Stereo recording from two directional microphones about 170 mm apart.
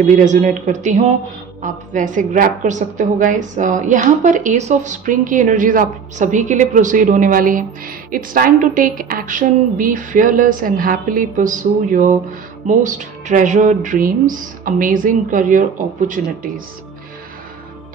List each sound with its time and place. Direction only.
0.1 s a woman's voice: 45° right (ahead or behind)